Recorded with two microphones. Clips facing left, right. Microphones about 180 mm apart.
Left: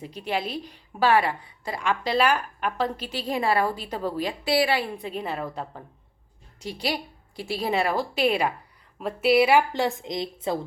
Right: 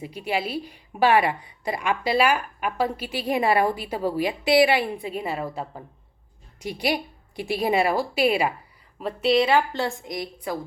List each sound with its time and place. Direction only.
0.0 s a woman's voice: 10° right (ahead or behind)
9.0 s a woman's voice: 5° left (ahead or behind); by 10.6 s 25° left (ahead or behind)